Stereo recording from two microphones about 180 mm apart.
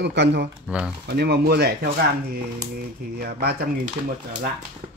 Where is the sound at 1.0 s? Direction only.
65° right (ahead or behind).